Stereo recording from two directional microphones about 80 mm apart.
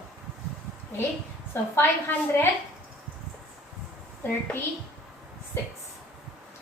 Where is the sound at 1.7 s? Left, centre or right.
Left.